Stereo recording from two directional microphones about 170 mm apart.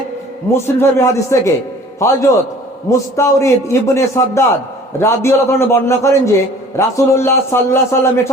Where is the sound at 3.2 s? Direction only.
15° left (ahead or behind).